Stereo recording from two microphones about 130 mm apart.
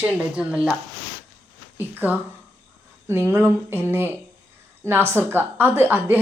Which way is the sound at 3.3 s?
15° right (ahead or behind).